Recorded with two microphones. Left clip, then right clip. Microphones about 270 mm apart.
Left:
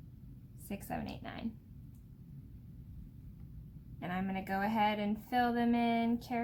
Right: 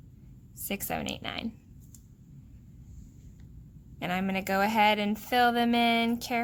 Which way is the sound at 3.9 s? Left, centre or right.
Right.